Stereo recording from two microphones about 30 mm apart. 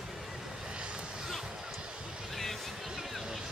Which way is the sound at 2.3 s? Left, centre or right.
Centre.